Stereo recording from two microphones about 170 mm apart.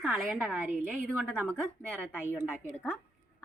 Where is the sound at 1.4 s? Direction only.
5° left (ahead or behind).